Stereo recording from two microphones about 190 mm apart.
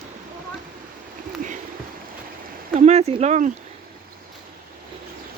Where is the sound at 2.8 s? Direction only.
35° right (ahead or behind).